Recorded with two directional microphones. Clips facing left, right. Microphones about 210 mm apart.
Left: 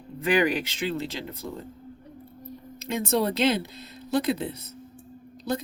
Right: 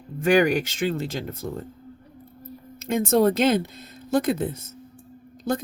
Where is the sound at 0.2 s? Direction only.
45° right (ahead or behind).